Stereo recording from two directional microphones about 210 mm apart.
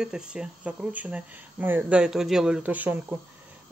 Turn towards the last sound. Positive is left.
turn(degrees=-5)  # may be behind; listen again after turning